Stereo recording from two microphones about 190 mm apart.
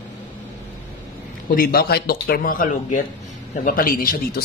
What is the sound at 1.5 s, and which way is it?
Speech, 55° left (ahead or behind).